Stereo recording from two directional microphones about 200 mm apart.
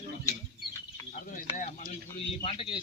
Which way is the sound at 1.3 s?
40° left (ahead or behind).